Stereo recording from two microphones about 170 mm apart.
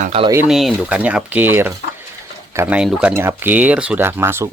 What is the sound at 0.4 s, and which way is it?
Speech, 5° right (ahead or behind).